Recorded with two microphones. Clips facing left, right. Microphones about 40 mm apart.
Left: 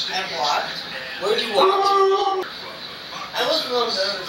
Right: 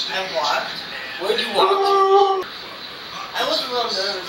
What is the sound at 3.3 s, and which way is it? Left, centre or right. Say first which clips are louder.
Speech: left 1 dB; centre.